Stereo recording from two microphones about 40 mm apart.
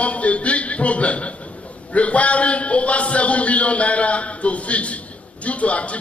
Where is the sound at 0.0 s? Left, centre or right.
Left.